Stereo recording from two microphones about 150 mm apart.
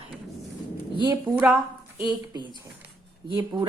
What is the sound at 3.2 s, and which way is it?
Speech, 30° right (ahead or behind).